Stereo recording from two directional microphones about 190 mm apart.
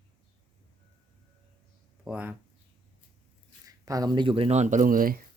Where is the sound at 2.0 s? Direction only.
10° right (ahead or behind).